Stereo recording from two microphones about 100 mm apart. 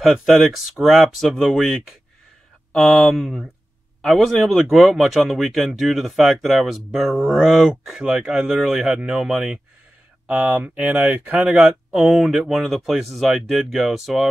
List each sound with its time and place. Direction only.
0.0 s speech: 5° right (ahead or behind)
11.3 s speech: 5° right (ahead or behind)